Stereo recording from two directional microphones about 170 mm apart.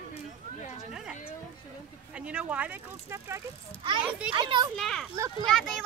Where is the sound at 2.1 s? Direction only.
5° right (ahead or behind).